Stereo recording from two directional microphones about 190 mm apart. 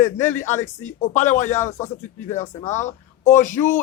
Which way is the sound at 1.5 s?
15° left (ahead or behind).